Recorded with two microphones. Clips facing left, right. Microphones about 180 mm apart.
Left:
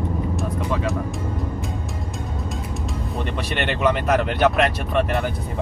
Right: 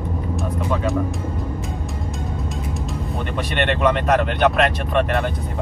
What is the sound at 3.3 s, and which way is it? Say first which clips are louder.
Speech: right 5 dB; centre (ahead or behind).